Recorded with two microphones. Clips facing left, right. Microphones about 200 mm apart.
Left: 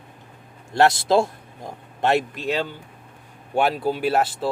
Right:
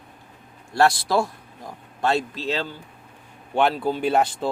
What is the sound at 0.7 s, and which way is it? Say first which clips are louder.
Speech: left 2 dB; 20° left (ahead or behind).